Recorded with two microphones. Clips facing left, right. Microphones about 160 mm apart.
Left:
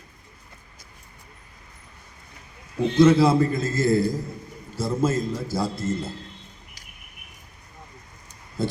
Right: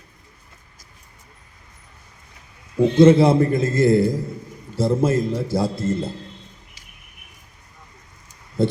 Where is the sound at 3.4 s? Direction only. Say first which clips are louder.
Right 5 dB; 55° right (ahead or behind).